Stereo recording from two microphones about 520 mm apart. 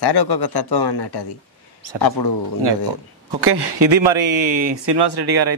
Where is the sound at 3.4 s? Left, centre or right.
Right.